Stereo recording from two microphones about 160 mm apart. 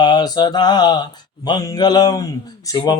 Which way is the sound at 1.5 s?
25° left (ahead or behind).